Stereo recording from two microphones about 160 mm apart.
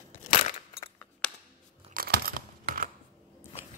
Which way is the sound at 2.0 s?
65° right (ahead or behind).